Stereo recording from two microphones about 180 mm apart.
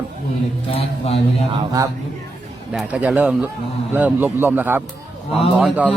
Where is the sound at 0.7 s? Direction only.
30° left (ahead or behind).